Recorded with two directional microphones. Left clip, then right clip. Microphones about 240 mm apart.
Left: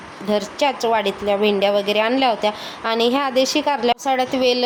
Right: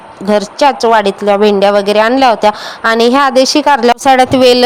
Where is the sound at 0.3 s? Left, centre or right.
Right.